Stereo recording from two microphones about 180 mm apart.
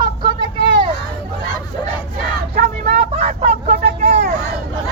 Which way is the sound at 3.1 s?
35° right (ahead or behind).